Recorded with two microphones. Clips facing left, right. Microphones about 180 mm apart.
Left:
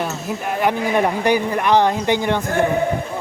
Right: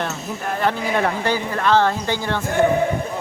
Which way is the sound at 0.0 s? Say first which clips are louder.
Left 2 dB; 10° left (ahead or behind).